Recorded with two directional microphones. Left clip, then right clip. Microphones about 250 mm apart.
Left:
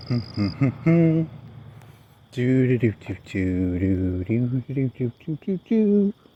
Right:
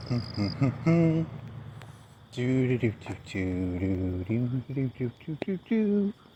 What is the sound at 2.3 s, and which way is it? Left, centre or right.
Speech, left.